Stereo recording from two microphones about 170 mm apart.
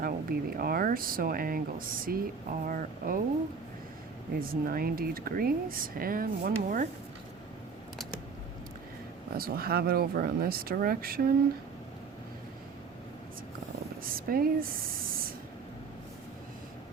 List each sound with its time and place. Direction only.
0.0 s speech: 60° right (ahead or behind)
4.4 s speech: 60° right (ahead or behind)
9.3 s speech: 60° right (ahead or behind)
14.3 s speech: 60° right (ahead or behind)